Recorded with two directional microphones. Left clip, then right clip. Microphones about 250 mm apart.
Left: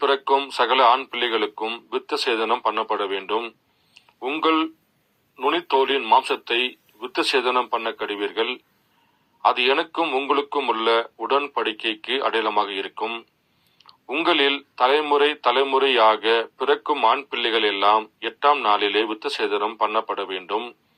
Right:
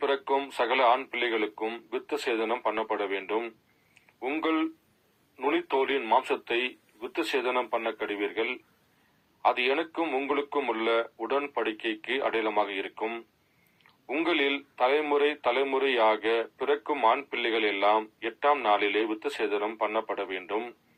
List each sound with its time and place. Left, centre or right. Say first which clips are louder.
0.0 s a man's voice: left 8 dB; left